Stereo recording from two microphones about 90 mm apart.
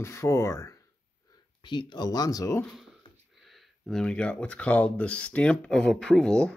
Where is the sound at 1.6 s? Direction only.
55° left (ahead or behind).